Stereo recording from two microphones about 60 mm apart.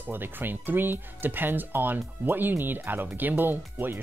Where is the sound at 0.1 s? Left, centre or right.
Right.